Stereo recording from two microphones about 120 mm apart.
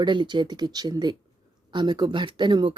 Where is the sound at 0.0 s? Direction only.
40° right (ahead or behind).